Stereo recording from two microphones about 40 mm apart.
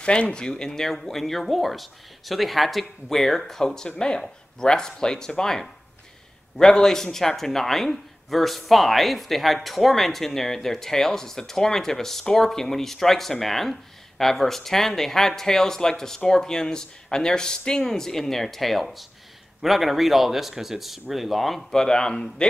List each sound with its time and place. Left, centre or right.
0.0 s speech: left; by 21.6 s centre
21.6 s speech: centre